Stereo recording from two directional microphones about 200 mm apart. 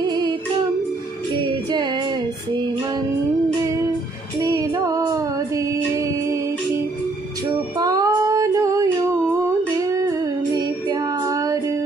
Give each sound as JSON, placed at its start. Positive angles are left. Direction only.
{"t": 0.0, "sound": "female singing", "side_deg": -20}
{"t": 4.4, "sound": "female singing", "side_deg": -15}
{"t": 7.8, "sound": "female singing", "side_deg": -20}
{"t": 9.8, "sound": "music", "side_deg": -15}